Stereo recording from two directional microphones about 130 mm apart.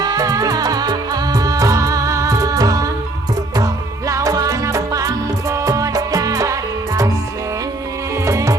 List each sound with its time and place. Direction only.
0.0 s music: 30° right (ahead or behind)
4.1 s music: 25° right (ahead or behind)
8.2 s music: 25° right (ahead or behind)